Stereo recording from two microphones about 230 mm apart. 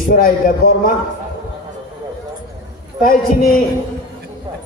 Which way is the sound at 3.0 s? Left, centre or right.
Left.